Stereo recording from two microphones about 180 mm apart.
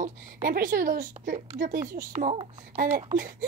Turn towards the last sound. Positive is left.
turn(degrees=-50)  # may be behind; listen again after turning